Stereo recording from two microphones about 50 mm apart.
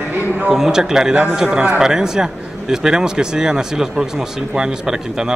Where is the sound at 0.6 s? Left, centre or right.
Centre.